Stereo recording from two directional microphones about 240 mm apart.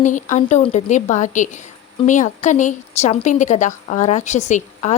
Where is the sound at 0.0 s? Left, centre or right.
Left.